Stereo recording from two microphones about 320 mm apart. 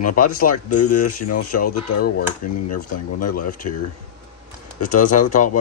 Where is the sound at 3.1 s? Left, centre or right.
Left.